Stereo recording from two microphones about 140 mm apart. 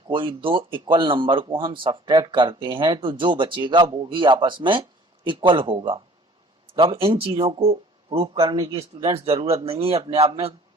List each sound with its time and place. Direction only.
0.1 s speech: 35° right (ahead or behind)
8.4 s a man's voice: 30° right (ahead or behind)
9.0 s speech: 45° right (ahead or behind)